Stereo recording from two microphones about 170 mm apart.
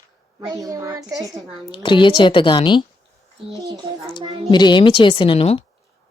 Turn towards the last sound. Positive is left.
turn(degrees=35)  # may be behind; listen again after turning